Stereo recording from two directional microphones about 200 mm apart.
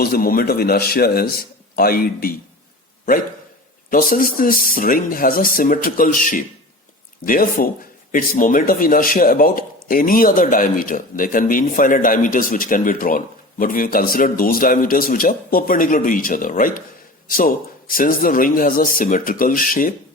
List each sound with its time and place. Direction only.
0.0 s speech: 50° left (ahead or behind)
3.8 s speech: 45° left (ahead or behind)